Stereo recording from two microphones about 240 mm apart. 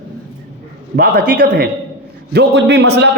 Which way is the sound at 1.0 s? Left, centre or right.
Right.